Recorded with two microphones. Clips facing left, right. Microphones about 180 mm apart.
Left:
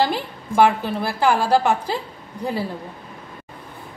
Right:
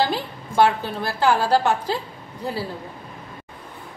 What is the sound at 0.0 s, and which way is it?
A woman's voice, 10° left (ahead or behind).